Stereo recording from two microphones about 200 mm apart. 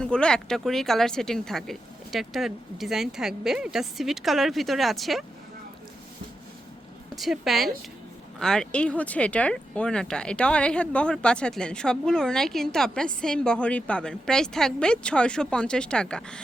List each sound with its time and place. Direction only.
0.0 s speech: 5° left (ahead or behind)
7.2 s speech: centre (ahead or behind)